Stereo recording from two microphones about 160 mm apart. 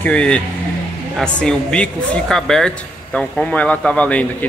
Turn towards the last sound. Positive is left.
turn(degrees=10)  # may be behind; listen again after turning